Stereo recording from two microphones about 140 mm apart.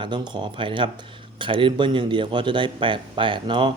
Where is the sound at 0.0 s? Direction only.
35° right (ahead or behind).